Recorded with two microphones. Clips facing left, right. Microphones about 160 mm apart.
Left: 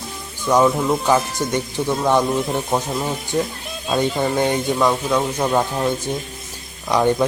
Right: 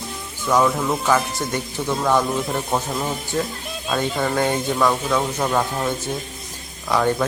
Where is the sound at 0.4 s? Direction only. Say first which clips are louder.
Left 3 dB; 15° left (ahead or behind).